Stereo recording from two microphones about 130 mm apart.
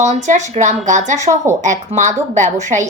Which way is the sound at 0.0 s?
65° right (ahead or behind).